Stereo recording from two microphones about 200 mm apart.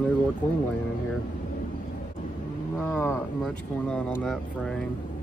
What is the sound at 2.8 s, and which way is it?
Speech, 15° left (ahead or behind).